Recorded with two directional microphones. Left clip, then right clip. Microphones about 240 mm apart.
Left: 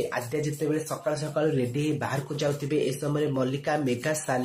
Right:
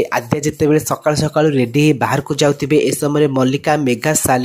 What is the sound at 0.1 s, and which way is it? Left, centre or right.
Speech, right.